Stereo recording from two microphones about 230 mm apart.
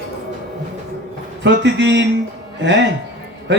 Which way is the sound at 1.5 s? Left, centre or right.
Right.